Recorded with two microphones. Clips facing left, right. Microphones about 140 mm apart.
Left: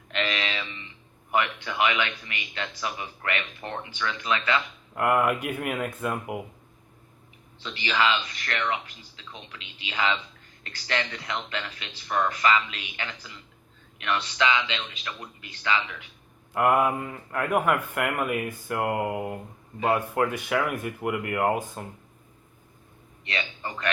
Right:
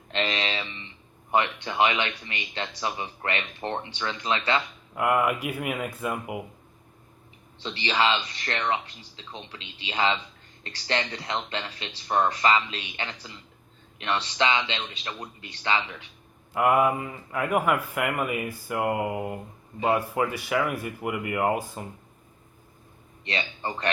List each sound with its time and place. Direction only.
0.1 s a sound: 30° right (ahead or behind)
1.3 s speech: 30° right (ahead or behind)
4.9 s a man's voice: centre (ahead or behind)
7.6 s speech: 30° right (ahead or behind)
16.6 s a man's voice: centre (ahead or behind)
23.2 s a man's voice: 30° right (ahead or behind)